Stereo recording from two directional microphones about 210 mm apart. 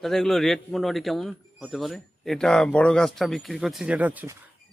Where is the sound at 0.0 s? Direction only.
Centre (ahead or behind).